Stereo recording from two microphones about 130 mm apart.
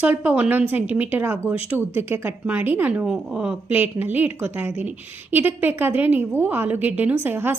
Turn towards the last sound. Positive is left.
turn(degrees=-15)  # may be behind; listen again after turning